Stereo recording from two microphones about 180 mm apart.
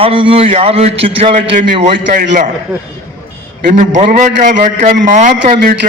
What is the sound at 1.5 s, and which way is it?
Speech, 45° right (ahead or behind).